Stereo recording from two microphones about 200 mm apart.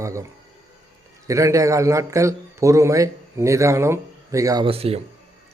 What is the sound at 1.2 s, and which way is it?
Speech, 15° right (ahead or behind).